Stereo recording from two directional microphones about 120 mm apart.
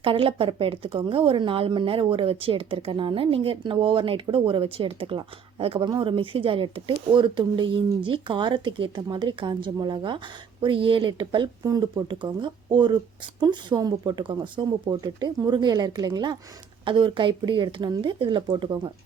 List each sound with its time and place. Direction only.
0.0 s a woman's voice: 45° right (ahead or behind)